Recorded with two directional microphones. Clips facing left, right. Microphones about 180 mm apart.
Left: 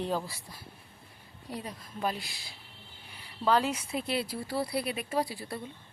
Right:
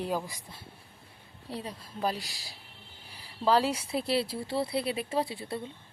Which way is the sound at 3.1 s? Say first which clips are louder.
Right 1 dB; 35° right (ahead or behind).